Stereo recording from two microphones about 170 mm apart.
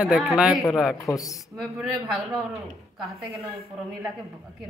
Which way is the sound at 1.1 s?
20° left (ahead or behind).